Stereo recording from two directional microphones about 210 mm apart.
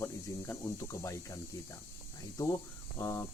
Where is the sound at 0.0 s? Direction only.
15° left (ahead or behind).